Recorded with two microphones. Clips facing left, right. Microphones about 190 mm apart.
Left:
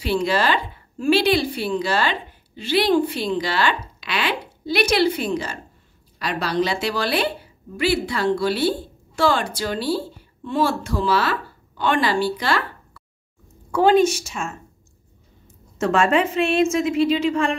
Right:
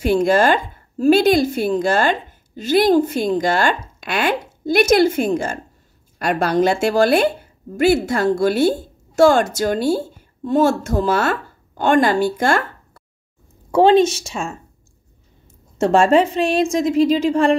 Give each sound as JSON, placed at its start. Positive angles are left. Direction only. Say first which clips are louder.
{"t": 0.0, "sound": "a woman's voice", "louder": "right 6 dB", "side_deg": -45}
{"t": 13.7, "sound": "a woman's voice", "louder": "right 3 dB", "side_deg": -25}
{"t": 15.8, "sound": "a woman's voice", "louder": "right 5 dB", "side_deg": -30}